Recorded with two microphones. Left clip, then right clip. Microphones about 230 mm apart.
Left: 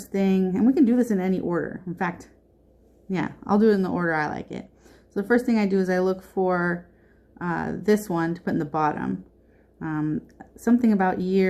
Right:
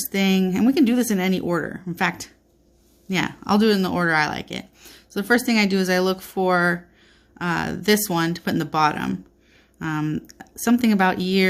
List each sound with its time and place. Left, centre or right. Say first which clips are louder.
0.0 s speech: right 2 dB; right